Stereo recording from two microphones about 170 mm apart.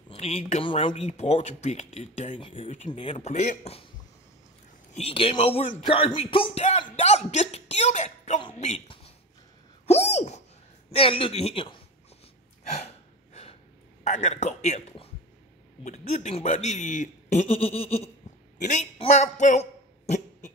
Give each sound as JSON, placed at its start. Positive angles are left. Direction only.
{"t": 0.1, "sound": "speech", "side_deg": 35}
{"t": 4.9, "sound": "speech", "side_deg": 35}
{"t": 6.8, "sound": "a sound", "side_deg": 40}
{"t": 8.5, "sound": "a man's voice", "side_deg": 45}
{"t": 9.8, "sound": "a sound", "side_deg": 40}
{"t": 10.9, "sound": "speech", "side_deg": 35}
{"t": 12.6, "sound": "gasp", "side_deg": 40}
{"t": 14.0, "sound": "a man's voice", "side_deg": 40}
{"t": 18.9, "sound": "a sound", "side_deg": 40}